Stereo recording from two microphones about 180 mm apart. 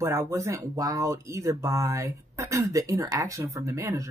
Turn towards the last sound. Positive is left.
turn(degrees=-15)  # may be behind; listen again after turning